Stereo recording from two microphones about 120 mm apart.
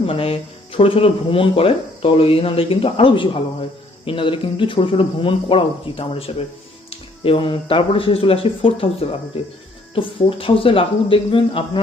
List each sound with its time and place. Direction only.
0.1 s speech: 50° left (ahead or behind)